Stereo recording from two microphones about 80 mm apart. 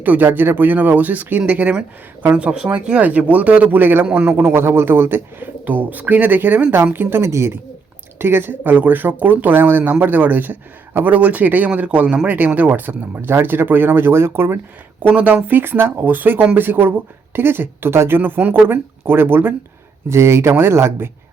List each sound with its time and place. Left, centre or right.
0.0 s speech: right
4.0 s speech: centre
4.3 s speech: right